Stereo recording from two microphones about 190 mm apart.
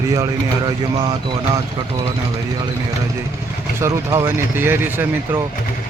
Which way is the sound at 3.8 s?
15° right (ahead or behind).